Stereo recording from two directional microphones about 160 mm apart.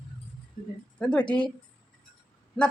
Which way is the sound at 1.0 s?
5° left (ahead or behind).